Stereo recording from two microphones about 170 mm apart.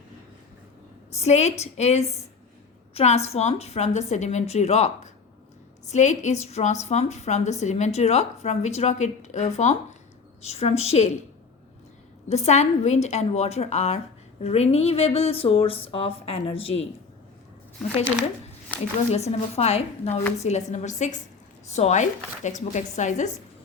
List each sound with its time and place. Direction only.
1.1 s a woman's voice: 40° left (ahead or behind)
12.3 s a woman's voice: 40° left (ahead or behind)
19.1 s a woman's voice: 40° left (ahead or behind)